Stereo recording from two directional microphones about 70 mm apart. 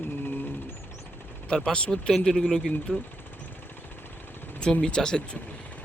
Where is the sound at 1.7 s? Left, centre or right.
Centre.